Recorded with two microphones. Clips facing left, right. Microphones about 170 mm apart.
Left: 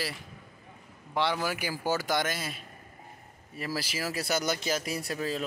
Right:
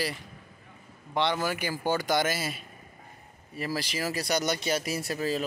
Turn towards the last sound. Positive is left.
turn(degrees=-5)  # may be behind; listen again after turning